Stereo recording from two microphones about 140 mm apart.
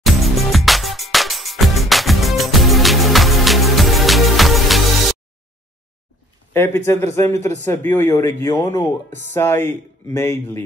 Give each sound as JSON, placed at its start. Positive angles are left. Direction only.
{"t": 0.0, "sound": "music", "side_deg": 0}
{"t": 6.5, "sound": "speech", "side_deg": 15}